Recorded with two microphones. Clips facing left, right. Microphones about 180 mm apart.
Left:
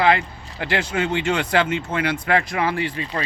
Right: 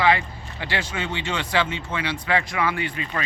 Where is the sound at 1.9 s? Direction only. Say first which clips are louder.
Left 4 dB; 40° left (ahead or behind).